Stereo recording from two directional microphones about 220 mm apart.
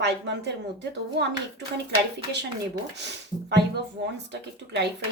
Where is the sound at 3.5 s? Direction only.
50° right (ahead or behind).